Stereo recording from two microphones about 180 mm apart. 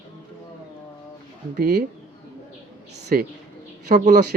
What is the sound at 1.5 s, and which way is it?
Speech, 60° right (ahead or behind).